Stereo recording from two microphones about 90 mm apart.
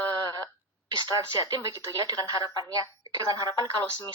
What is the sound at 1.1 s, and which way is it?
Speech, 45° right (ahead or behind).